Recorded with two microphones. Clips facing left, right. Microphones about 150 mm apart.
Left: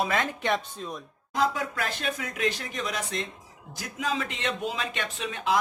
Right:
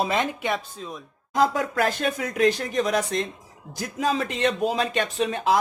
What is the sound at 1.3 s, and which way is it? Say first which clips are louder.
Speech: right 5 dB; 40° right (ahead or behind).